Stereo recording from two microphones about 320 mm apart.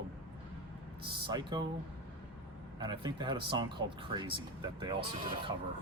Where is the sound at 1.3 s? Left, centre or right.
Centre.